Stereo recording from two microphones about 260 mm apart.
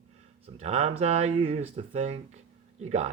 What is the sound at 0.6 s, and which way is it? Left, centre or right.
Speech, right.